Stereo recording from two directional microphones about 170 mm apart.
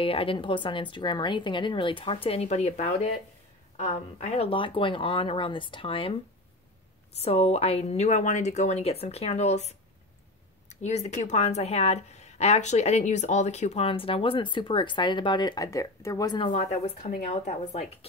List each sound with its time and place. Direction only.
0.0 s speech: 35° left (ahead or behind)
7.2 s speech: 35° left (ahead or behind)
16.9 s speech: 40° left (ahead or behind)